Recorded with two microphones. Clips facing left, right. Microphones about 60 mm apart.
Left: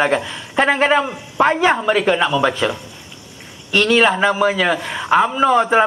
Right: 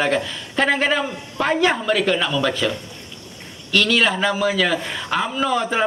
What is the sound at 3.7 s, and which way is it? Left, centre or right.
A man's voice, left.